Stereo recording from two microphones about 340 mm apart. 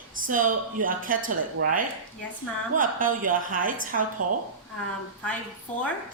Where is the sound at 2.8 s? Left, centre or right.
Right.